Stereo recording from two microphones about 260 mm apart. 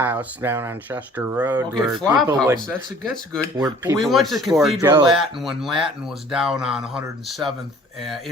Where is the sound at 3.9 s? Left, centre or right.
Centre.